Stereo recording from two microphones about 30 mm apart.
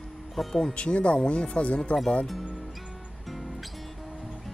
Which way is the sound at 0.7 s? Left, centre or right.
Left.